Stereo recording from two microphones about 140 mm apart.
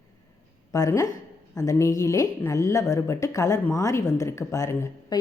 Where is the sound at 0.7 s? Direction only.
20° left (ahead or behind).